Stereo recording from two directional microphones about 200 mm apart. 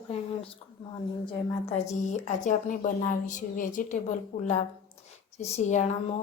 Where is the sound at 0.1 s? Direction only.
30° left (ahead or behind).